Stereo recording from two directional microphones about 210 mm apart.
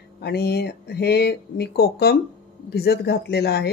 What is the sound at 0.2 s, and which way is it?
Speech, 50° left (ahead or behind).